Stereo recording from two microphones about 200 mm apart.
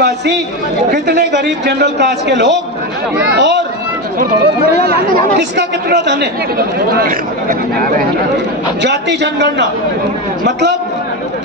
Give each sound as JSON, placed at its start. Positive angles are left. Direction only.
{"t": 0.9, "sound": "a man's voice", "side_deg": -50}
{"t": 5.6, "sound": "a man's voice", "side_deg": -60}
{"t": 8.8, "sound": "a man's voice", "side_deg": -60}